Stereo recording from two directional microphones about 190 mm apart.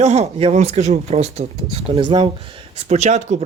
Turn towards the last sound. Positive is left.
turn(degrees=-35)  # may be behind; listen again after turning